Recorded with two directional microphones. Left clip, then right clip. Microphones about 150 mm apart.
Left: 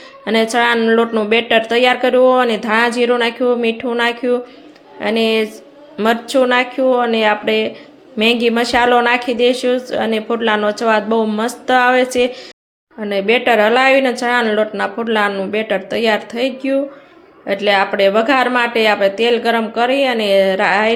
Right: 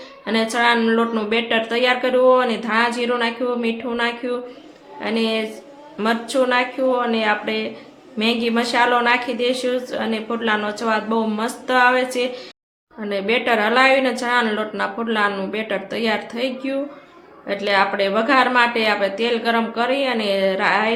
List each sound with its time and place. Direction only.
0.3 s a woman's voice: 35° left (ahead or behind)